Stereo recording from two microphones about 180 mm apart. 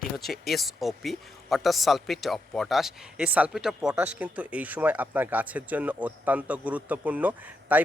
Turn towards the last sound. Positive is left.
turn(degrees=-10)  # may be behind; listen again after turning